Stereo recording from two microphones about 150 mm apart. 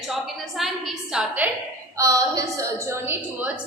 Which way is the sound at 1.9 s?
20° right (ahead or behind).